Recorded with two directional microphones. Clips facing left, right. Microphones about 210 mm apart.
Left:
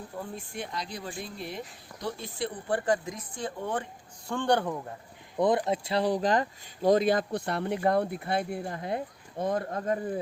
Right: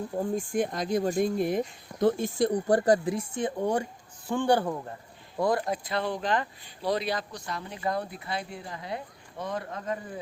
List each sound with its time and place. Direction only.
0.2 s speech: 45° right (ahead or behind); by 4.9 s 5° right (ahead or behind)
5.4 s speech: 20° left (ahead or behind); by 10.2 s 45° left (ahead or behind)